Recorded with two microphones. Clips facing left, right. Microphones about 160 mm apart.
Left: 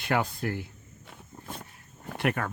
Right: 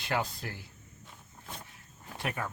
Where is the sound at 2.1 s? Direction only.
65° left (ahead or behind).